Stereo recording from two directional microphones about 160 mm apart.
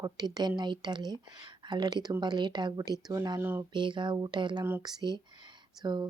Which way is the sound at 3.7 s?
30° right (ahead or behind).